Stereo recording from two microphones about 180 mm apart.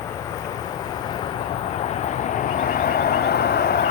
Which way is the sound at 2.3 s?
50° left (ahead or behind).